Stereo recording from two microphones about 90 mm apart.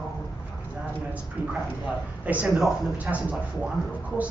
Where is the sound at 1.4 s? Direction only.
15° right (ahead or behind).